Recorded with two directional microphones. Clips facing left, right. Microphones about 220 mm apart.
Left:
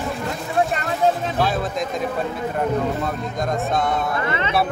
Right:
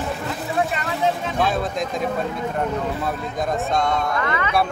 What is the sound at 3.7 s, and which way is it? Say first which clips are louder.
Speech: right 1 dB; 5° left (ahead or behind).